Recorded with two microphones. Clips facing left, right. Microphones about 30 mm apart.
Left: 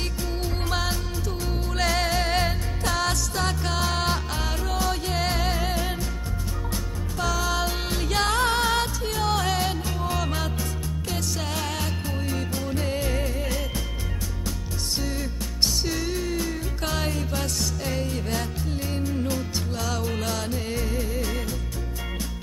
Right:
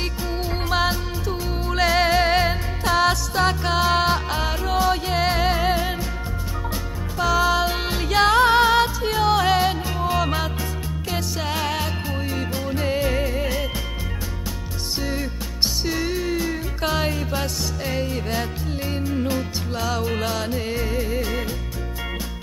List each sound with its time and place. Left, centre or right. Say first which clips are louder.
0.2 s music: right 3 dB; centre
15.0 s music: right 6 dB; centre